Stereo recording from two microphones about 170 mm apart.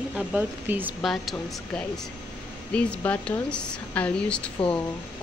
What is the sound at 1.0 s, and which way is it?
Speech, centre (ahead or behind).